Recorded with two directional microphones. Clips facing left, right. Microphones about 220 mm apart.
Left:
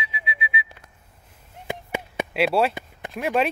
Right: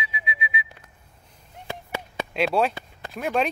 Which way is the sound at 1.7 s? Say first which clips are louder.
Left 4 dB; 15° left (ahead or behind).